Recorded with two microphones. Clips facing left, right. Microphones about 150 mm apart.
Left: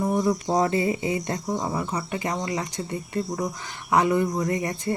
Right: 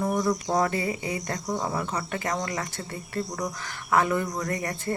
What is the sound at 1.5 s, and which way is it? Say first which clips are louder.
Speech: right 1 dB; 5° left (ahead or behind).